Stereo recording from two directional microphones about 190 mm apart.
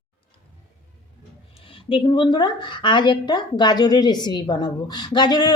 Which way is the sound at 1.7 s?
25° left (ahead or behind).